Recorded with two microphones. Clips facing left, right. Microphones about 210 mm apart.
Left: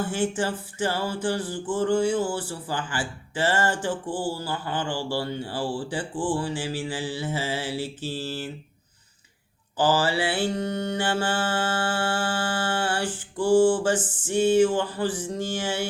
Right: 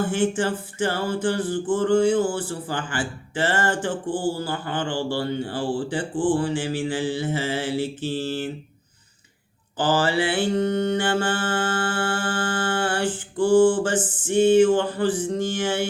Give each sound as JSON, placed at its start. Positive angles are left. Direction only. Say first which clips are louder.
{"t": 0.1, "sound": "speech", "louder": "right 3 dB", "side_deg": -50}
{"t": 9.7, "sound": "speech", "louder": "right 1 dB", "side_deg": -50}